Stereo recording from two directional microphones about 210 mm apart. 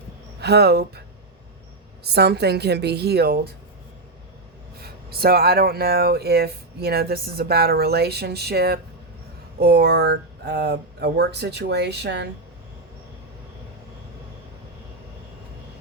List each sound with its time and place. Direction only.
0.3 s speech: 50° right (ahead or behind)
2.0 s speech: 50° right (ahead or behind)
4.8 s speech: 45° right (ahead or behind)